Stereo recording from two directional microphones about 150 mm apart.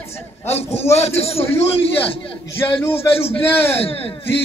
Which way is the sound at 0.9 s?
45° left (ahead or behind).